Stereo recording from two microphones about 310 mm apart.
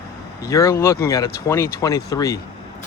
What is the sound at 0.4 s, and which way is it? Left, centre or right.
Speech, centre.